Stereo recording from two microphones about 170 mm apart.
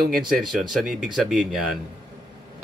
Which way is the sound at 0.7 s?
Centre (ahead or behind).